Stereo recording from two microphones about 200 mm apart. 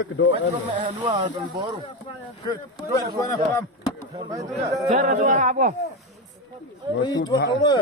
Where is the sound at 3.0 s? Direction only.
15° left (ahead or behind).